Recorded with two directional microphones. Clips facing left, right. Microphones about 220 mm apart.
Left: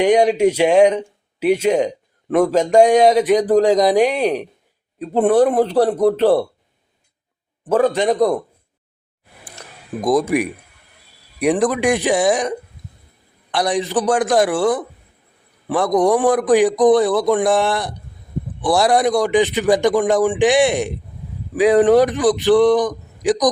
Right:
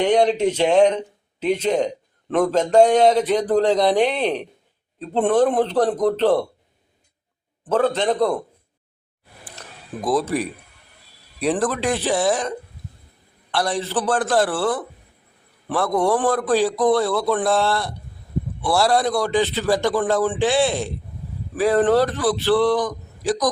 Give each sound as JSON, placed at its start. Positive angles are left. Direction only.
{"t": 0.0, "sound": "a man's voice", "side_deg": 10}
{"t": 7.7, "sound": "a man's voice", "side_deg": 10}
{"t": 9.4, "sound": "a sound", "side_deg": 15}
{"t": 11.3, "sound": "a man's voice", "side_deg": 15}